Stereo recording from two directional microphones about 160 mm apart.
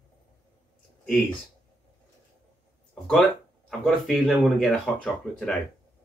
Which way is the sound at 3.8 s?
Centre (ahead or behind).